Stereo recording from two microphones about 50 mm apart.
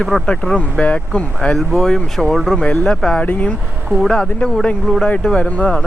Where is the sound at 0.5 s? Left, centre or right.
Left.